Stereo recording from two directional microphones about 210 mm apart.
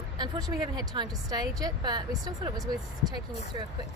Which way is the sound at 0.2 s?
20° right (ahead or behind).